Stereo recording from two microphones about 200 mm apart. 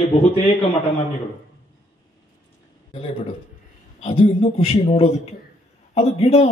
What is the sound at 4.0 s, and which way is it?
A man's voice, 30° left (ahead or behind).